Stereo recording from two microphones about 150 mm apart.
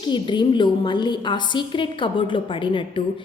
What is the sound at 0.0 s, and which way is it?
A woman's voice, 30° left (ahead or behind).